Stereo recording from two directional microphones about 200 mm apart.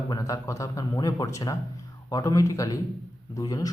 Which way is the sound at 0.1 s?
15° left (ahead or behind).